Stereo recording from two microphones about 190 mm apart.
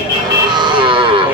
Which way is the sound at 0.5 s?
25° right (ahead or behind).